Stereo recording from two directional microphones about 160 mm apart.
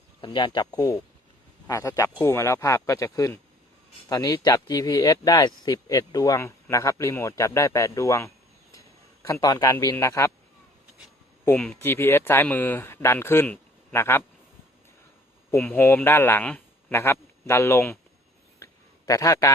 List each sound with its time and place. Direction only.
0.2 s speech: 30° left (ahead or behind)
11.5 s speech: 5° left (ahead or behind)
15.5 s a man's voice: 10° left (ahead or behind)
18.6 s a sound: 20° left (ahead or behind)